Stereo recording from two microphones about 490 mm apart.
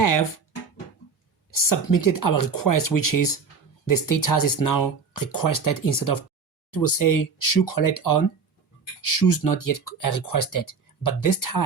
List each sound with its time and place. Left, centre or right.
0.0 s music: left
1.5 s speech: left